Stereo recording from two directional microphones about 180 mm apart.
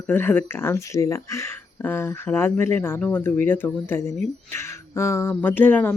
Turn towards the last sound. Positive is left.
turn(degrees=10)  # may be behind; listen again after turning